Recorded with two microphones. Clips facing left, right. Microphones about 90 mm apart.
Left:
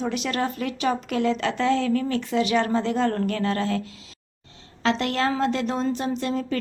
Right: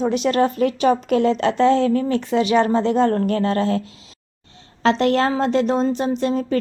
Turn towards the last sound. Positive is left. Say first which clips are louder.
# right 5 dB
turn(degrees=-30)  # may be behind; listen again after turning